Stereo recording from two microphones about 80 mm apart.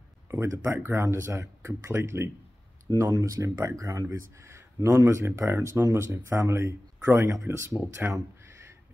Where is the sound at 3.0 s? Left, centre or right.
Right.